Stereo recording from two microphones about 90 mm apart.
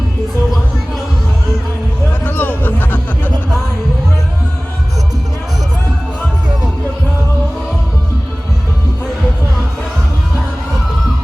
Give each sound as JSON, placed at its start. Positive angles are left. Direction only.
{"t": 2.2, "sound": "music", "side_deg": 20}